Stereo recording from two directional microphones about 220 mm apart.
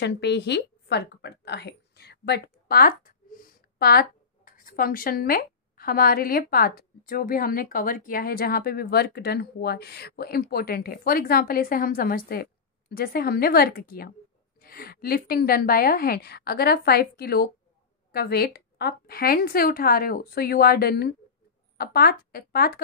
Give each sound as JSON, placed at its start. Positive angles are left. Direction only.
{"t": 0.0, "sound": "a woman's voice", "side_deg": 50}